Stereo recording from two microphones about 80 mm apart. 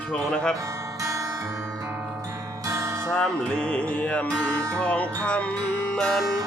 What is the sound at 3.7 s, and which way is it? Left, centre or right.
Music, centre.